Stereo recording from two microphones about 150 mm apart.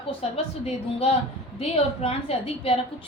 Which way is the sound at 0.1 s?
40° left (ahead or behind).